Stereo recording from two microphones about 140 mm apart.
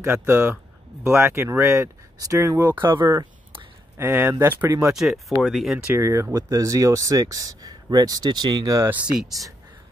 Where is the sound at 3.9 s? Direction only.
15° right (ahead or behind).